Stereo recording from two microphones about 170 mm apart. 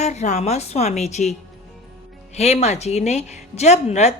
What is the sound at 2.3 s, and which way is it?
A woman's voice, 40° left (ahead or behind).